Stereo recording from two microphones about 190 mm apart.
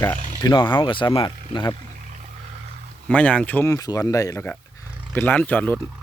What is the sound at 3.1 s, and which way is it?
Speech, 5° left (ahead or behind).